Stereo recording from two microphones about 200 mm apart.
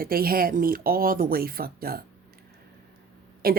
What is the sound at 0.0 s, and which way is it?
Speech, 50° right (ahead or behind).